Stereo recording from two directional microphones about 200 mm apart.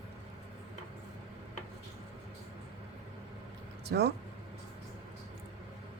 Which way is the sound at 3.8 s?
55° right (ahead or behind).